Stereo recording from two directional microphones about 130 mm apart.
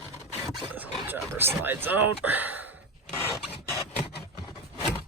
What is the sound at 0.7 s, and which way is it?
Speech, 15° right (ahead or behind).